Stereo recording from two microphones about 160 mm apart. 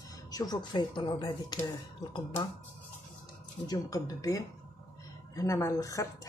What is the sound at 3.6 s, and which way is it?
Speech, 25° left (ahead or behind).